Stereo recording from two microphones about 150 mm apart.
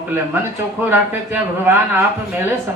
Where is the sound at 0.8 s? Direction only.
15° right (ahead or behind).